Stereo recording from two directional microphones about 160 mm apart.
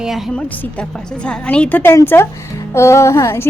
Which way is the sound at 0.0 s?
Centre (ahead or behind).